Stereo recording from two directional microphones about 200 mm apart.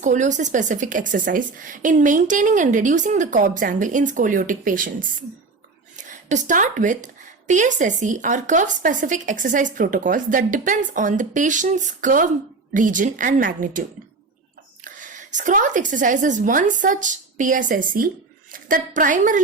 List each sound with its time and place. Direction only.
0.0 s a woman's voice: 40° right (ahead or behind)
14.8 s a woman's voice: 40° right (ahead or behind)